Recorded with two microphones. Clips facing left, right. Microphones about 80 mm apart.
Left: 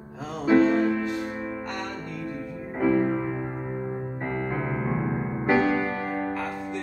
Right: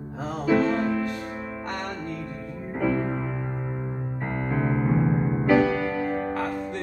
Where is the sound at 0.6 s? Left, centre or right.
Centre.